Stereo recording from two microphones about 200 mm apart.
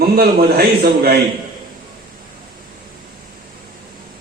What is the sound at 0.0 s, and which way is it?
A man's voice, 50° right (ahead or behind).